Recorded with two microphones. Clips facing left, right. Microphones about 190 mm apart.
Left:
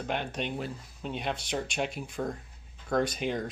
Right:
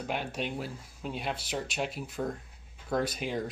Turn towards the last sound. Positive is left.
turn(degrees=-5)  # may be behind; listen again after turning